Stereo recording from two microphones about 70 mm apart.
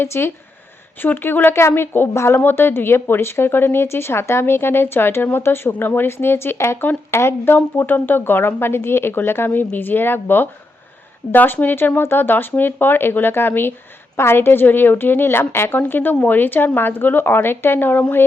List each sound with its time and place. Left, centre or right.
0.0 s speech: left